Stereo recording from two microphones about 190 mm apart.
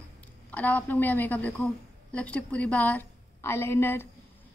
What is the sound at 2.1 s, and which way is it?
A woman's voice, 5° left (ahead or behind).